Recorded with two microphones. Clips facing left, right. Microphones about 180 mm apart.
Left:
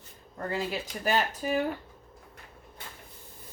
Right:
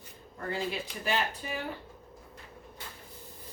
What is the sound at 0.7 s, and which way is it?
Speech, 45° left (ahead or behind).